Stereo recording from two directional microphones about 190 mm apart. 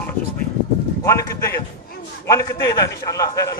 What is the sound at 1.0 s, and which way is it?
A man's voice, 15° left (ahead or behind).